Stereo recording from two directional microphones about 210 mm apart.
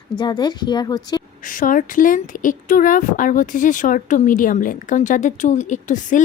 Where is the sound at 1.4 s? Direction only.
40° left (ahead or behind).